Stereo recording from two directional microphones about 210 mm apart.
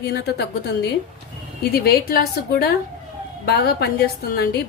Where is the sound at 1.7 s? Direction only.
50° left (ahead or behind).